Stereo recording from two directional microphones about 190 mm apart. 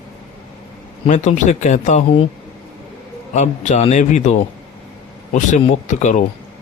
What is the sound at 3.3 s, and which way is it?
Speech, 40° left (ahead or behind).